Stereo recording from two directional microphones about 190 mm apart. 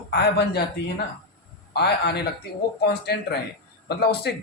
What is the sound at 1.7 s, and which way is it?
Speech, 60° left (ahead or behind).